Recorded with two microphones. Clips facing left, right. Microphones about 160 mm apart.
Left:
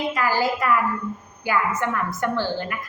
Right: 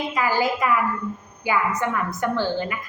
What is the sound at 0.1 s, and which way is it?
Speech, 15° right (ahead or behind).